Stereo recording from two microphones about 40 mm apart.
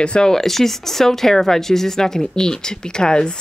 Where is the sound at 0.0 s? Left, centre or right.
Left.